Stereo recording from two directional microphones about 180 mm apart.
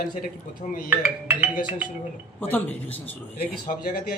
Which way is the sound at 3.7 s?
55° left (ahead or behind).